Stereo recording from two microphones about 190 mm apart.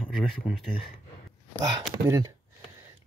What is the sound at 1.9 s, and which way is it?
Speech, 20° right (ahead or behind).